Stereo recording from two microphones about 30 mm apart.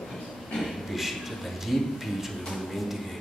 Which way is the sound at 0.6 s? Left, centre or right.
Centre.